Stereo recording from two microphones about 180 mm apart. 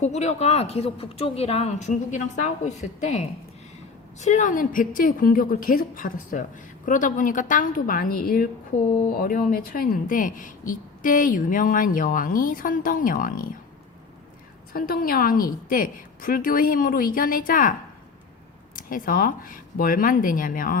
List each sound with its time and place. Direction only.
0.0 s speech: 40° left (ahead or behind)
14.7 s speech: 55° left (ahead or behind)
18.8 s speech: 50° left (ahead or behind)